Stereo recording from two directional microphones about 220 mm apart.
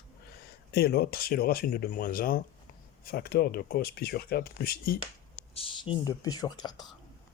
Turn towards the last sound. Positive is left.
turn(degrees=20)  # may be behind; listen again after turning